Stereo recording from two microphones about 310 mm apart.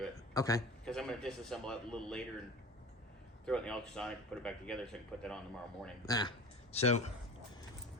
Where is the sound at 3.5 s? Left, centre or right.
Centre.